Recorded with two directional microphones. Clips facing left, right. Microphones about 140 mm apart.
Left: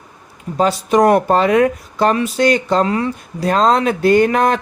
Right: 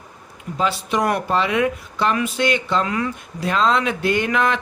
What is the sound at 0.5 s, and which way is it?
Speech, 45° left (ahead or behind).